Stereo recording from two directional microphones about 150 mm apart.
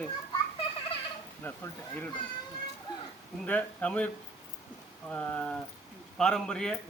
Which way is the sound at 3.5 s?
10° left (ahead or behind).